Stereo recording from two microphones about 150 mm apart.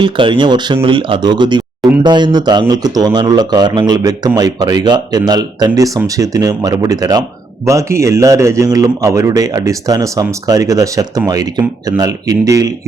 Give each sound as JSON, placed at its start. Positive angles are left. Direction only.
{"t": 0.0, "sound": "speech", "side_deg": -35}